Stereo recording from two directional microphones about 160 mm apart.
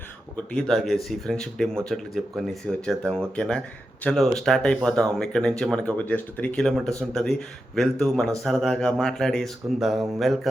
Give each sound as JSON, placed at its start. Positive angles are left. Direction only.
{"t": 0.3, "sound": "speech", "side_deg": 5}